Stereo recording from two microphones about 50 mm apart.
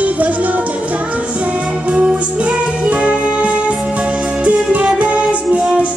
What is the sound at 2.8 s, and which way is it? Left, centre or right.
Music, centre.